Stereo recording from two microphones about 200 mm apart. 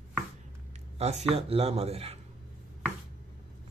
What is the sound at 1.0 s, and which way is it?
Speech, 30° right (ahead or behind).